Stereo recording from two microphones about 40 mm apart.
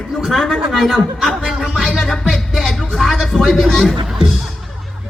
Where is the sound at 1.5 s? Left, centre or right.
Centre.